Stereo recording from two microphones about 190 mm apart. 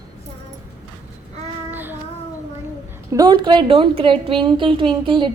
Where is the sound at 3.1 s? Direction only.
20° right (ahead or behind).